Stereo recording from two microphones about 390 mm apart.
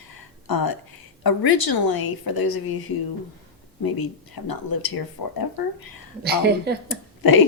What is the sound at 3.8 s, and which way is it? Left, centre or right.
Speech, left.